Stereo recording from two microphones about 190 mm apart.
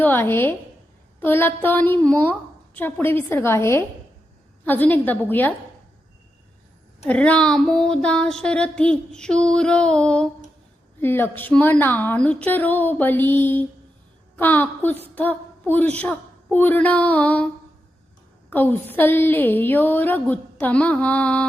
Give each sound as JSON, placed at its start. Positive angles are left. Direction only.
{"t": 0.0, "sound": "a woman's voice", "side_deg": 10}
{"t": 7.0, "sound": "a sound", "side_deg": 5}
{"t": 11.0, "sound": "a woman's voice", "side_deg": 10}
{"t": 18.5, "sound": "a woman's voice", "side_deg": 10}